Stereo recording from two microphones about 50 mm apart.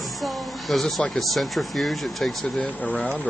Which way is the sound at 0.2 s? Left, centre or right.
Centre.